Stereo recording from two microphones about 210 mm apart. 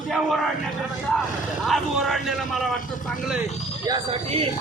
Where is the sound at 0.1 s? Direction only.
Centre (ahead or behind).